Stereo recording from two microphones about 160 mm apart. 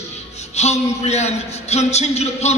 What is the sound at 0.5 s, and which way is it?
A man's voice, 45° left (ahead or behind).